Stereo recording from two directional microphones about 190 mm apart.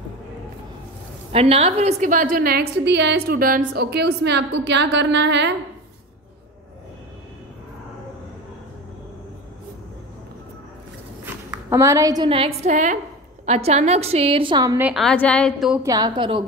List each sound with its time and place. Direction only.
1.3 s a woman's voice: 30° right (ahead or behind); by 5.5 s 65° right (ahead or behind)
11.2 s a woman's voice: 15° right (ahead or behind)
14.8 s a woman's voice: 5° right (ahead or behind)
15.0 s a woman's voice: 5° left (ahead or behind)
15.7 s a woman's voice: 15° right (ahead or behind)